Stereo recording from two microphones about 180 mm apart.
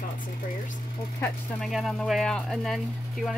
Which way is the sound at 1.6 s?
Centre (ahead or behind).